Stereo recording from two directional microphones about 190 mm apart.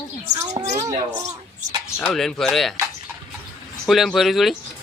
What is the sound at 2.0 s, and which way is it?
Speech, centre (ahead or behind).